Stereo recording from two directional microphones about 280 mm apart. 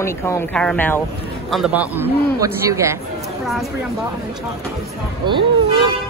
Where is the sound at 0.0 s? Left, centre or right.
Centre.